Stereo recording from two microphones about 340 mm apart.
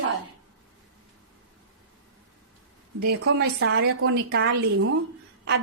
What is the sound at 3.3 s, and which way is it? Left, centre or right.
A woman's voice, right.